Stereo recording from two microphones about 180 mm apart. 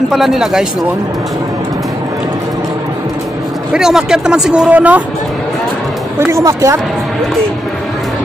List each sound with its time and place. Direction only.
0.1 s speech: centre (ahead or behind)
3.7 s speech: 5° right (ahead or behind)
6.1 s speech: 15° right (ahead or behind)